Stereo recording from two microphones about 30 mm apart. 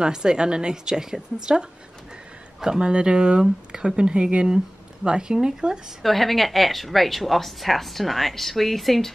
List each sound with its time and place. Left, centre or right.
0.0 s a woman's voice: right
2.8 s a woman's voice: right
6.0 s a woman's voice: centre